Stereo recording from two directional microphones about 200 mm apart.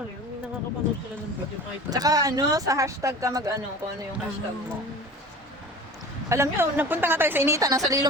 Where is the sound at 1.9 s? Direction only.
20° right (ahead or behind).